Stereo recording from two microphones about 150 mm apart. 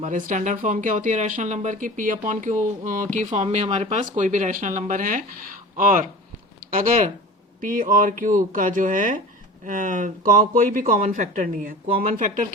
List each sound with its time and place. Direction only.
0.0 s speech: 60° right (ahead or behind)
7.6 s speech: 65° right (ahead or behind)